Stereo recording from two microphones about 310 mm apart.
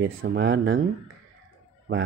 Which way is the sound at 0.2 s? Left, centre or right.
Right.